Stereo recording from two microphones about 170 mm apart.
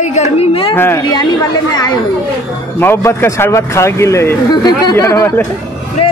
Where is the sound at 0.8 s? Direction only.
15° left (ahead or behind).